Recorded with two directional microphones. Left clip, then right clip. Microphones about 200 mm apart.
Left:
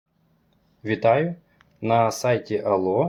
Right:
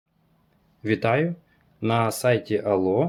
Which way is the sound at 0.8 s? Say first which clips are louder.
Left 3 dB; 30° right (ahead or behind).